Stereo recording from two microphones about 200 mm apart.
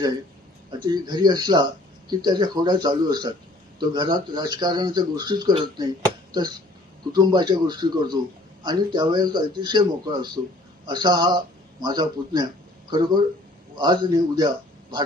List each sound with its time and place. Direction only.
0.9 s speech: 20° right (ahead or behind)
7.1 s a man's voice: 20° right (ahead or behind)